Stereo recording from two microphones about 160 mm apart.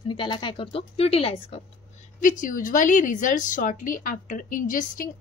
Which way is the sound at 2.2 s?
55° left (ahead or behind).